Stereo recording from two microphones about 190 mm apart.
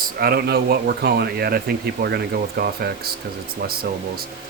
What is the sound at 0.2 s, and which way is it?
Speech, 55° right (ahead or behind).